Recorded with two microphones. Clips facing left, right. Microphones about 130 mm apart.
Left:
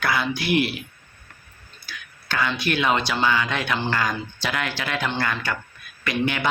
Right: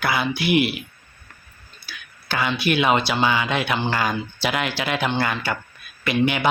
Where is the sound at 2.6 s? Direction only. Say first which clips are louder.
Right 5 dB; 10° right (ahead or behind).